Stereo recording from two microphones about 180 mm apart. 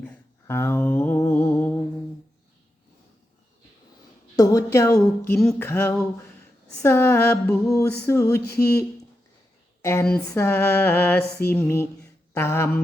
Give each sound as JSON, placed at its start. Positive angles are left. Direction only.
{"t": 0.0, "sound": "a sound", "side_deg": 10}
{"t": 4.4, "sound": "speech", "side_deg": 20}
{"t": 9.8, "sound": "speech", "side_deg": 15}